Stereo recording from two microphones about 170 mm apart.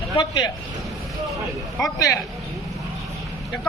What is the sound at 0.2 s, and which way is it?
Speech, 25° left (ahead or behind).